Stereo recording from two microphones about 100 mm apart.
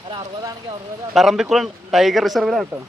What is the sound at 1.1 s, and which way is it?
Speech, centre (ahead or behind).